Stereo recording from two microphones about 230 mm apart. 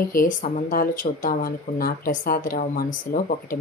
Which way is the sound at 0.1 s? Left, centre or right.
Left.